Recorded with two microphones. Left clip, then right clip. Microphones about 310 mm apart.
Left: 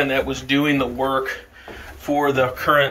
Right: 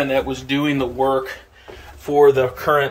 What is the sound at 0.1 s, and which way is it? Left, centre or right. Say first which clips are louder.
Speech: even; centre.